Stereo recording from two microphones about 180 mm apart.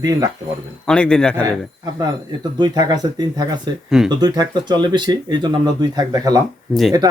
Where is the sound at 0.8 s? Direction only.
5° left (ahead or behind).